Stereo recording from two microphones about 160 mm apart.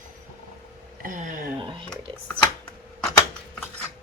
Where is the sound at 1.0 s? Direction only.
55° right (ahead or behind).